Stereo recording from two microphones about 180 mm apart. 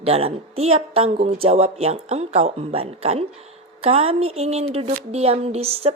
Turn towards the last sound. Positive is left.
turn(degrees=-35)  # may be behind; listen again after turning